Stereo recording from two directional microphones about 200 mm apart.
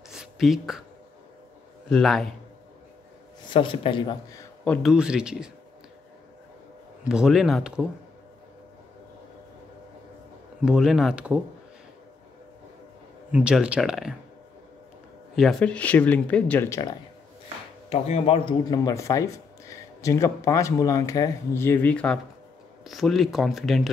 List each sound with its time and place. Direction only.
0.1 s a sound: centre (ahead or behind)
1.9 s speech: centre (ahead or behind)
3.5 s speech: 25° left (ahead or behind)
4.6 s speech: centre (ahead or behind)
7.1 s speech: centre (ahead or behind)
10.6 s speech: 5° right (ahead or behind)
13.3 s speech: 5° right (ahead or behind)
15.3 s speech: centre (ahead or behind)
17.8 s speech: 30° left (ahead or behind); by 23.9 s centre (ahead or behind)